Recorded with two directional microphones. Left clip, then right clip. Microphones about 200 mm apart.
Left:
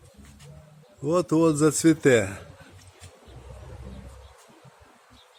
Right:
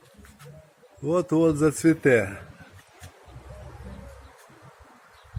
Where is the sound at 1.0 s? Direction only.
20° left (ahead or behind).